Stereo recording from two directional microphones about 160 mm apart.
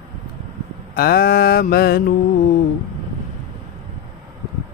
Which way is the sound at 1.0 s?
70° left (ahead or behind).